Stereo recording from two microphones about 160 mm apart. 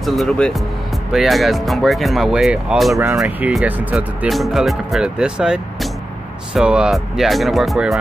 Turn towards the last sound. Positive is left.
turn(degrees=0)  # may be behind; listen again after turning